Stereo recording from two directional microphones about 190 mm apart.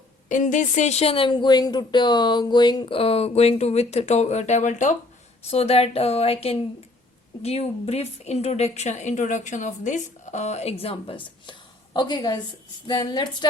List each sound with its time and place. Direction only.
0.3 s a woman's voice: 40° left (ahead or behind); by 13.5 s 20° left (ahead or behind)